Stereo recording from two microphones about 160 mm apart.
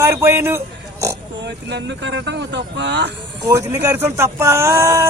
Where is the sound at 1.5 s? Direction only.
90° right.